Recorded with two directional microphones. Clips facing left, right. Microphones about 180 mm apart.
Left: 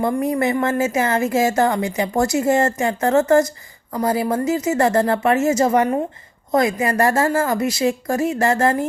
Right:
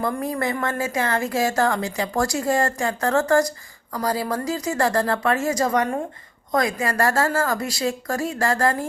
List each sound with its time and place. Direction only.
0.0 s a woman's voice: 20° left (ahead or behind)